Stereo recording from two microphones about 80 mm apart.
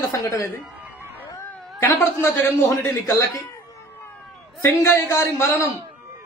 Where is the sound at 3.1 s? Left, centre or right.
Left.